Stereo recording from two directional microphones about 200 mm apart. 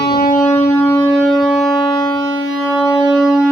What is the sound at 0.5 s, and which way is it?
Music, 10° left (ahead or behind).